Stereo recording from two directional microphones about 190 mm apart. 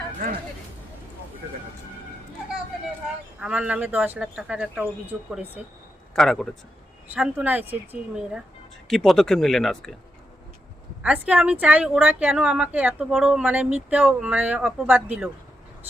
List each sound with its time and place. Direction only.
0.2 s speech: 45° right (ahead or behind)
3.4 s speech: 5° right (ahead or behind)
6.1 s speech: centre (ahead or behind)
11.0 s speech: 5° right (ahead or behind)